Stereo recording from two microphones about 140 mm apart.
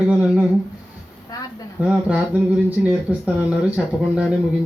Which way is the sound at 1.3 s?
25° left (ahead or behind).